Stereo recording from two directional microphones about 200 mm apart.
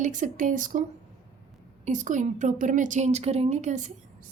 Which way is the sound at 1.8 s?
35° right (ahead or behind).